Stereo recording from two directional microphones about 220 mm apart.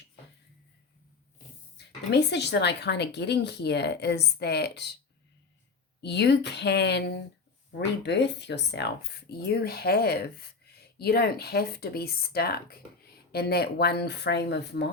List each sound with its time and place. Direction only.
2.1 s speech: 50° left (ahead or behind)
6.0 s speech: 50° left (ahead or behind)
8.0 s speech: 50° left (ahead or behind)